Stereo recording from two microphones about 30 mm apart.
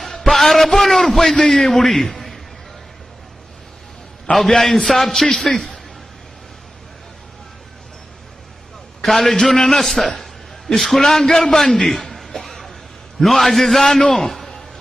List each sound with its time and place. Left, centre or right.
0.0 s a sound: centre
0.9 s a man's voice: centre
4.3 s a man's voice: centre
9.0 s a man's voice: centre
12.4 s a sound: centre
13.2 s a man's voice: centre